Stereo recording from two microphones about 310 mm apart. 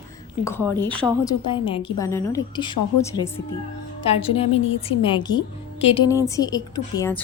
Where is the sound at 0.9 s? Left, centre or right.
Centre.